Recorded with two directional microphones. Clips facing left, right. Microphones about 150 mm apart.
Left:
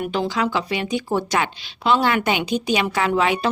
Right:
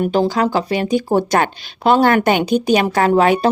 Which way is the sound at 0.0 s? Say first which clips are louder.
Right 6 dB; 40° right (ahead or behind).